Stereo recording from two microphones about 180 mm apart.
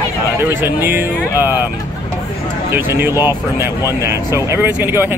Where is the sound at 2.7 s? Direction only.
15° right (ahead or behind).